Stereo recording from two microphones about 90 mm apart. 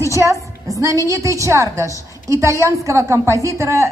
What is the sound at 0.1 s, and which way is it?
A woman's voice, 35° right (ahead or behind).